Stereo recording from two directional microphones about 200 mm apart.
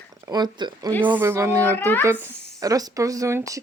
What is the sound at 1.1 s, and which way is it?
Speech, 10° right (ahead or behind).